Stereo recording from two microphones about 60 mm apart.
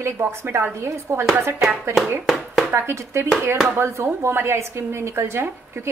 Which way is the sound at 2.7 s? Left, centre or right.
Right.